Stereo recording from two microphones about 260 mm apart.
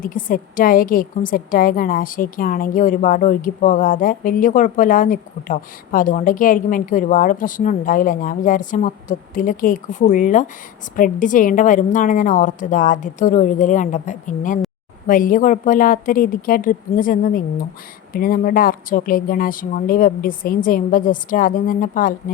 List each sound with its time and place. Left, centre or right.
0.0 s a woman's voice: left